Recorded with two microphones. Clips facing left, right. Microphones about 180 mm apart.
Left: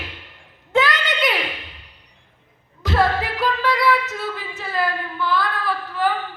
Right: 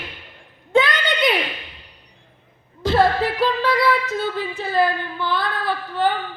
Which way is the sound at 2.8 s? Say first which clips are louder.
Right 3 dB; 30° right (ahead or behind).